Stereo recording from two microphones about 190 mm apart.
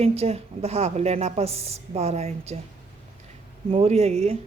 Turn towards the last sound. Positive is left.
turn(degrees=-35)  # may be behind; listen again after turning